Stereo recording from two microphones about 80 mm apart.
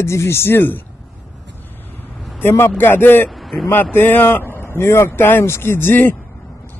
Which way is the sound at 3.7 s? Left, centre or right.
Left.